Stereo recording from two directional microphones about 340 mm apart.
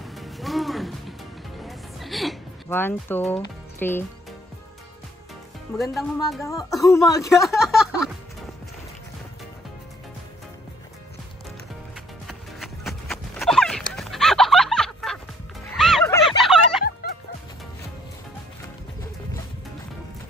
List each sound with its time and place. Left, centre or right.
0.0 s music: centre
3.8 s speech: centre
6.3 s speech: centre
11.9 s music: centre
13.9 s fowl: centre
15.7 s music: centre
17.0 s music: left